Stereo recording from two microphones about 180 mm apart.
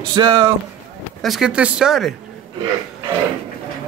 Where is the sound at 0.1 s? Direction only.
25° right (ahead or behind).